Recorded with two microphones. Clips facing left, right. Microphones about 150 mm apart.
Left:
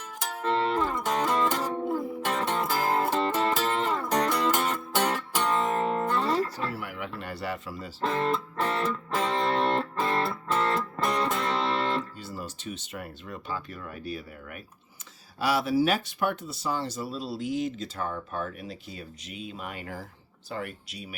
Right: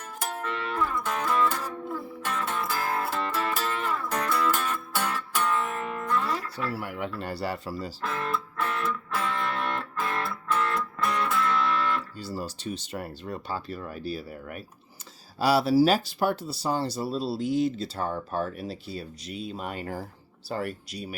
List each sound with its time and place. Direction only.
0.4 s music: 30° left (ahead or behind)
2.4 s music: 35° left (ahead or behind)
2.9 s music: 20° left (ahead or behind)
5.4 s music: 35° left (ahead or behind)
6.7 s speech: 35° right (ahead or behind)
8.0 s music: 25° left (ahead or behind)
12.2 s speech: 35° right (ahead or behind)